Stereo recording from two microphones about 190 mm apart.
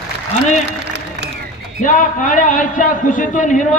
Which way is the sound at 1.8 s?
45° left (ahead or behind).